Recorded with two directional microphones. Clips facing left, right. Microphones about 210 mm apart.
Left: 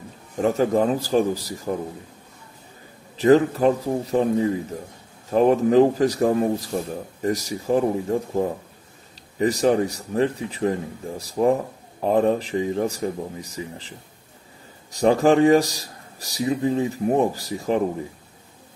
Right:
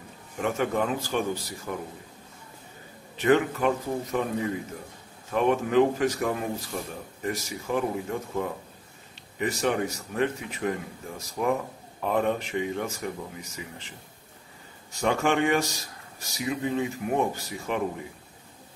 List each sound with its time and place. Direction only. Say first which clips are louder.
0.4 s a man's voice: left 7 dB; 35° left (ahead or behind)
3.2 s a man's voice: left 6 dB; 35° left (ahead or behind)